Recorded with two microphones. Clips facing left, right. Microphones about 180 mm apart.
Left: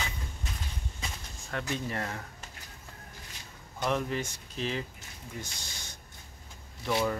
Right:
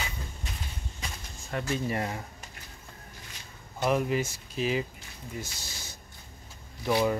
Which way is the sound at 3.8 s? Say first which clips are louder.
Right 4 dB; 10° right (ahead or behind).